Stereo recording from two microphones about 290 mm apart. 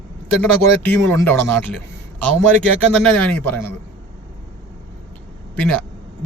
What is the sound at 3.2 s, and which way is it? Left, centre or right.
Speech, centre.